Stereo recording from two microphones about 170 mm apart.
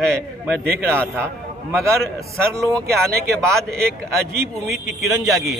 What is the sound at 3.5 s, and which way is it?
A man's voice, centre (ahead or behind).